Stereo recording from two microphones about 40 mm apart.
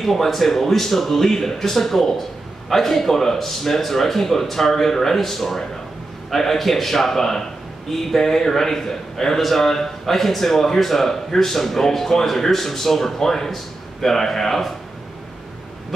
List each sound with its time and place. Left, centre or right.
0.0 s a man's voice: centre